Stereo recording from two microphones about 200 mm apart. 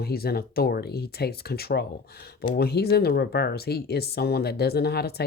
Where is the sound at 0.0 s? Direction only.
50° left (ahead or behind).